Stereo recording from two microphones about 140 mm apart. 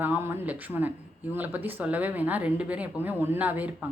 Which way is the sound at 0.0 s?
15° right (ahead or behind).